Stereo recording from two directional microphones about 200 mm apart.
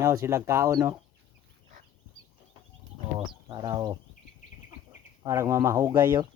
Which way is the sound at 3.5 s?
20° right (ahead or behind).